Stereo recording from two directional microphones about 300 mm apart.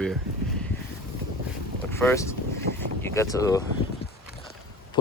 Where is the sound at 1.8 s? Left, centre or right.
Centre.